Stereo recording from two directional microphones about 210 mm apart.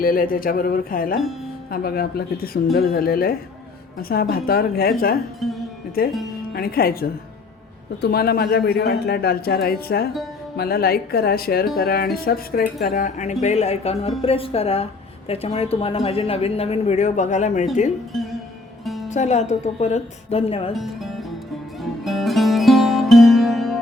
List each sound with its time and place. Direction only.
0.0 s a woman's voice: 45° left (ahead or behind)
18.1 s speech: centre (ahead or behind)
19.0 s speech: 35° left (ahead or behind)
20.7 s speech: centre (ahead or behind)
21.8 s music: centre (ahead or behind)